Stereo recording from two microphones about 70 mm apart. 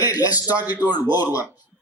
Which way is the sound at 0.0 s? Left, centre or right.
Left.